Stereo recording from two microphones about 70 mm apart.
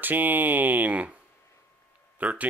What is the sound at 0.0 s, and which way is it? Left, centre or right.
Speech, right.